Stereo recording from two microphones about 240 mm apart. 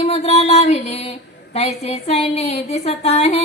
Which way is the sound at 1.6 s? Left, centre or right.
Left.